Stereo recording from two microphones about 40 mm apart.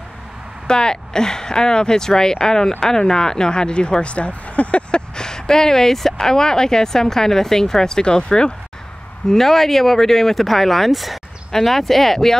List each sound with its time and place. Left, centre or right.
0.7 s speech: centre
5.1 s speech: centre
9.3 s speech: centre